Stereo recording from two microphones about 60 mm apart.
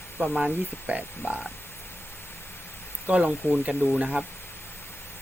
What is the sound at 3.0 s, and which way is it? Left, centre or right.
Speech, right.